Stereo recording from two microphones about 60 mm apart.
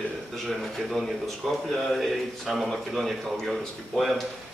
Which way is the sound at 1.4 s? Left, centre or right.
Centre.